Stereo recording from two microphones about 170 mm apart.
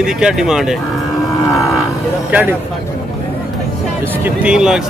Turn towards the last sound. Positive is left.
turn(degrees=-5)  # may be behind; listen again after turning